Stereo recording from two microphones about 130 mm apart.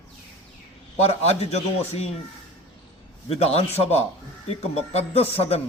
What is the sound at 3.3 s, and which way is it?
Speech, 50° left (ahead or behind).